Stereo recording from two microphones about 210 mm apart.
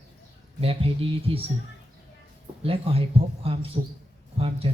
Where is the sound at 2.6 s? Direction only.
25° right (ahead or behind).